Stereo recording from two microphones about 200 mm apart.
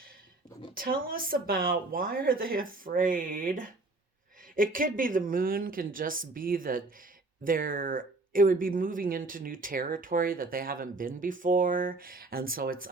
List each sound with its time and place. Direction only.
0.8 s speech: 45° right (ahead or behind)